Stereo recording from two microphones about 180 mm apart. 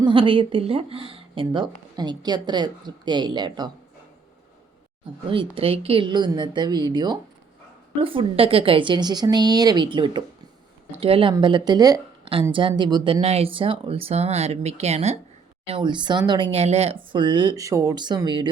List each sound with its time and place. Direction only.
0.0 s a woman's voice: 30° right (ahead or behind)
5.3 s a woman's voice: 30° right (ahead or behind)